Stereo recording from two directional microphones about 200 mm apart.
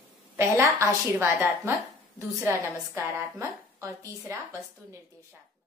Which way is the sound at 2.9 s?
15° right (ahead or behind).